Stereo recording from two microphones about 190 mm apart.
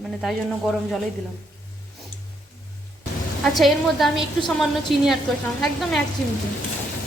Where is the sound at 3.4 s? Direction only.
Centre (ahead or behind).